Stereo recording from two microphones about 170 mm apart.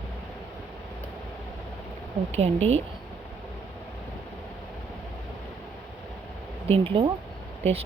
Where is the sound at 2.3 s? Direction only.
35° right (ahead or behind).